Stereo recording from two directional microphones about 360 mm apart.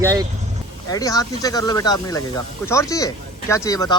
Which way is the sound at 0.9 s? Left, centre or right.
Centre.